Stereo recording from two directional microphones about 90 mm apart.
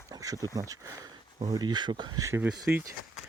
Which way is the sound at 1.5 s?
50° right (ahead or behind).